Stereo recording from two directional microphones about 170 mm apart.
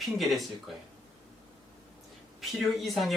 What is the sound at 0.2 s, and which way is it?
Speech, centre (ahead or behind).